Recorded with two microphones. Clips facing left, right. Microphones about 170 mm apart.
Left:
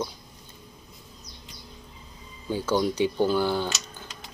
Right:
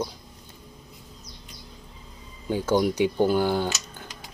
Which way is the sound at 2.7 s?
15° right (ahead or behind).